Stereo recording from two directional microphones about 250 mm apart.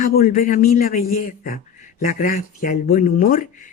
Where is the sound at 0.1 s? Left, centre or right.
Left.